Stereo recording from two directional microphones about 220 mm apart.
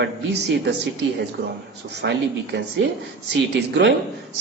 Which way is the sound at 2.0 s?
50° right (ahead or behind).